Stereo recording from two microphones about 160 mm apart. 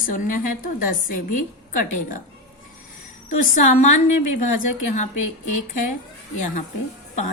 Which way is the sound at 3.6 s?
50° left (ahead or behind).